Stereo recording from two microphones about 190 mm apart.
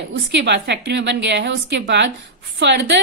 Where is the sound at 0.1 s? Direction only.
65° right (ahead or behind).